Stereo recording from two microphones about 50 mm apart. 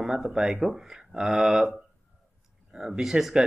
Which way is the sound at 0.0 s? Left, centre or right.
Centre.